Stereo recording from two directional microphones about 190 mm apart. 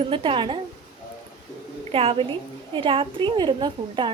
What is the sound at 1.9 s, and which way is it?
A woman's voice, 30° right (ahead or behind).